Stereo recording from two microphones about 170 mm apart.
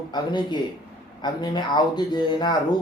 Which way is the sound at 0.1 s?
25° left (ahead or behind).